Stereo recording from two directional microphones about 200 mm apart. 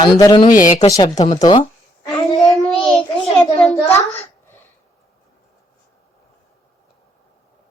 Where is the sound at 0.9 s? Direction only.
15° left (ahead or behind).